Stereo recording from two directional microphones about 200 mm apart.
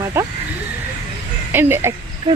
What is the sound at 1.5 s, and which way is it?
Speech, 10° right (ahead or behind).